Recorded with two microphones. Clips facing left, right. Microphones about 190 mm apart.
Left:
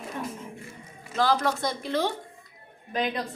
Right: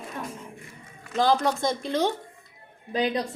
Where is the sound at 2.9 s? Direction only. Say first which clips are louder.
Right 3 dB; 35° right (ahead or behind).